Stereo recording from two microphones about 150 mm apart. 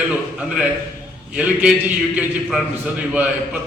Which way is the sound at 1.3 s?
10° right (ahead or behind).